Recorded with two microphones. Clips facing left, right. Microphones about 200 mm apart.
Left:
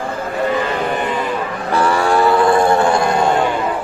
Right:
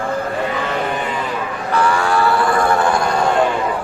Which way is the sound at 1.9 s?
25° left (ahead or behind).